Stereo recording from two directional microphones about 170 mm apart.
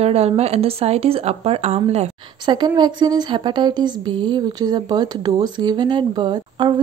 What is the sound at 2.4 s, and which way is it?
A woman's voice, 25° right (ahead or behind).